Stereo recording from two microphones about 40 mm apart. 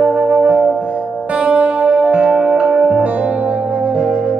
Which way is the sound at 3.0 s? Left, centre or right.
Right.